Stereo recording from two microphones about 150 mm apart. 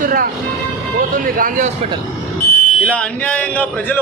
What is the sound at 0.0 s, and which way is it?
Speech, 70° right (ahead or behind).